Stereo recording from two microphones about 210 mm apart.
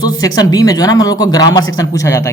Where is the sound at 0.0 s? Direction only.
20° left (ahead or behind).